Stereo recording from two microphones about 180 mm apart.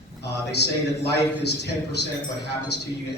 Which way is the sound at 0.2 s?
65° left (ahead or behind).